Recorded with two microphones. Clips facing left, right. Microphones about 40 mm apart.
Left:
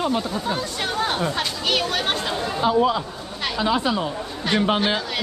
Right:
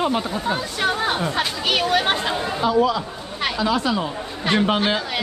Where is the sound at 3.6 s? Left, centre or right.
Centre.